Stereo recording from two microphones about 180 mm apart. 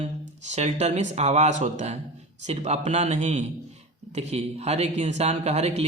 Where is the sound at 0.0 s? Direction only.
40° right (ahead or behind).